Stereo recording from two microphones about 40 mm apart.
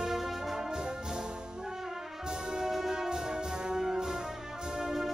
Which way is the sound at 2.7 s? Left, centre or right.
Centre.